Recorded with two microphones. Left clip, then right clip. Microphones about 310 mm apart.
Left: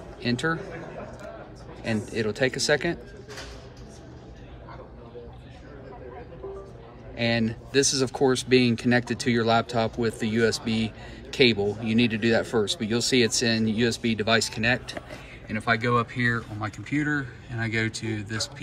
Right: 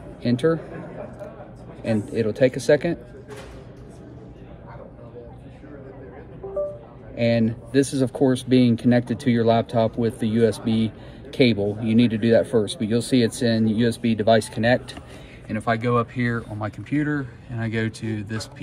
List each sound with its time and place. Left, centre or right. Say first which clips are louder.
0.2 s speech: right 6 dB; centre
1.9 s speech: right 4 dB; centre
7.2 s speech: right 5 dB; centre
10.5 s speech: right 3 dB; centre
10.8 s speech: right 4 dB; centre